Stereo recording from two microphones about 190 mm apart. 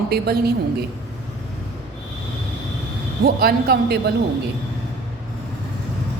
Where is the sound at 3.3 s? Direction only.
55° right (ahead or behind).